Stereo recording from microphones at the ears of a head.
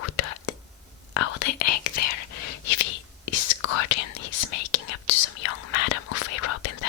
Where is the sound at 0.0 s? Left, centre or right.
Left.